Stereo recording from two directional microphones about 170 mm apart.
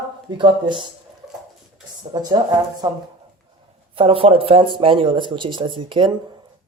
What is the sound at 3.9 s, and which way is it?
Speech, 30° right (ahead or behind).